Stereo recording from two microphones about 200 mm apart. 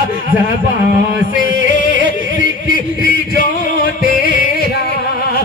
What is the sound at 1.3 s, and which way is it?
Music, 45° left (ahead or behind).